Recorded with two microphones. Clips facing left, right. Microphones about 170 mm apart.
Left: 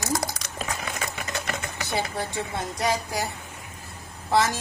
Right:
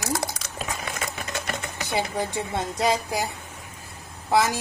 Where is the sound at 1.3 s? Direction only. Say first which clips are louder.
Even; centre (ahead or behind).